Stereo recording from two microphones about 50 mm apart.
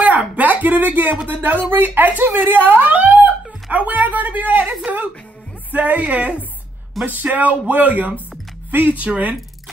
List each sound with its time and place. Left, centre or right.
0.0 s a sound: right
1.2 s speech: right
5.7 s speech: right
7.0 s speech: centre
7.3 s speech: right